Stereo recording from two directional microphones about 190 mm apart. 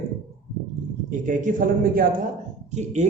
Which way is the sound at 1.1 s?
40° right (ahead or behind).